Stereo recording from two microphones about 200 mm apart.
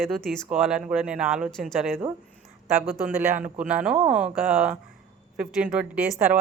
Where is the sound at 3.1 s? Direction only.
10° right (ahead or behind).